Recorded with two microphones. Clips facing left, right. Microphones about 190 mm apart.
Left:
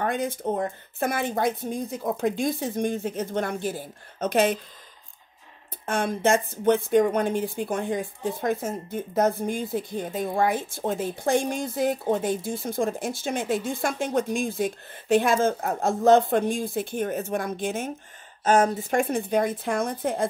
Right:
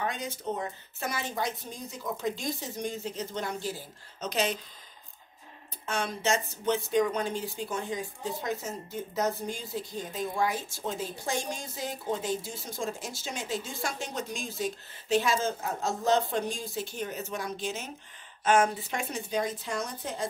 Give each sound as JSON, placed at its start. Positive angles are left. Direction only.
{"t": 0.0, "sound": "speech", "side_deg": 55}
{"t": 5.9, "sound": "speech", "side_deg": 55}
{"t": 18.4, "sound": "speech", "side_deg": 40}